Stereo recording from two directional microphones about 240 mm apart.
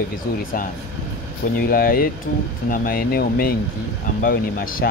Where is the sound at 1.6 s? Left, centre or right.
Left.